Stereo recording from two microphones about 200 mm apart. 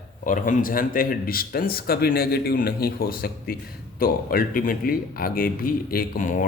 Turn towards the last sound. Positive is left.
turn(degrees=40)  # may be behind; listen again after turning